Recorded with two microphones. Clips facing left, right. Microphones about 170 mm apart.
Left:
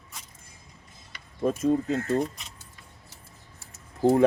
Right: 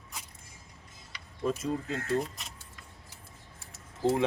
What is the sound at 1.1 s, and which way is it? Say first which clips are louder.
Speech: left 5 dB; 50° left (ahead or behind).